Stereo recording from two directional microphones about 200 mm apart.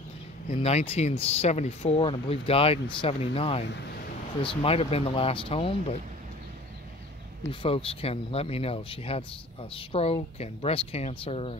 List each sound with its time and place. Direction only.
0.5 s speech: 35° left (ahead or behind)
3.6 s speech: 60° left (ahead or behind)
4.4 s speech: 25° left (ahead or behind)
7.6 s speech: 30° left (ahead or behind)